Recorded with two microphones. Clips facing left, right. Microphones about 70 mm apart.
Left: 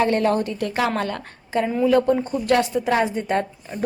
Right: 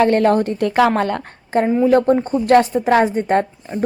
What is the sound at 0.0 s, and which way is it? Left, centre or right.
A woman's voice, right.